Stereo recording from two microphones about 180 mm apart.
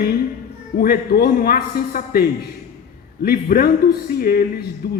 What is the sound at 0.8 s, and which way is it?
A man's voice, 55° left (ahead or behind).